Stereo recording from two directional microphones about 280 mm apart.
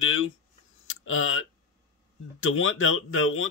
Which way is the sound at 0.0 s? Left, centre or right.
Left.